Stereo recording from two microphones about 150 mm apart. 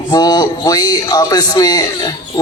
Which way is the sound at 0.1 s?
25° left (ahead or behind).